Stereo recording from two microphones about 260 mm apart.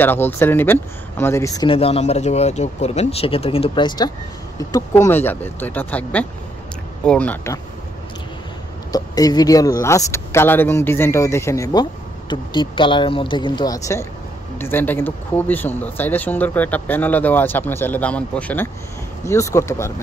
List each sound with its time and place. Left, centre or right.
0.0 s speech: centre
8.9 s speech: centre